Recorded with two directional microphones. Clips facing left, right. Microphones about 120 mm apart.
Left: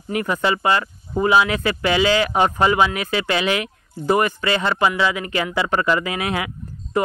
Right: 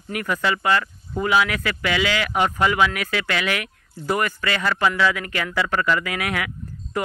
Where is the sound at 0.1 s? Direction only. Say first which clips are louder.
Left 3 dB; 25° left (ahead or behind).